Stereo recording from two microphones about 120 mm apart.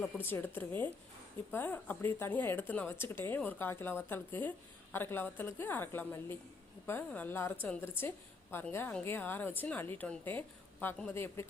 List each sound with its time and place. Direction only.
0.0 s speech: 20° left (ahead or behind)